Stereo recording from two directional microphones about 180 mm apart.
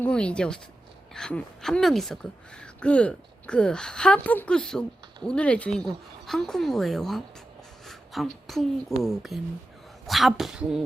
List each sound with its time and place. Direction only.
0.0 s speech: 5° left (ahead or behind)
7.9 s a sound: centre (ahead or behind)
9.0 s speech: centre (ahead or behind)